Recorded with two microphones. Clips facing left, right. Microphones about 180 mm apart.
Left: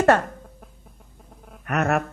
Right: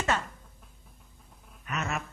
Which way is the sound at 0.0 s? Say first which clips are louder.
Left 12 dB; 60° left (ahead or behind).